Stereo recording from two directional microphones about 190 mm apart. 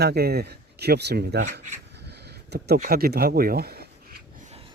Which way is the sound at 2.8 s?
50° right (ahead or behind).